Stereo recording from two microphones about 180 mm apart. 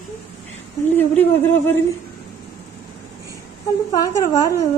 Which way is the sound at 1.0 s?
10° left (ahead or behind).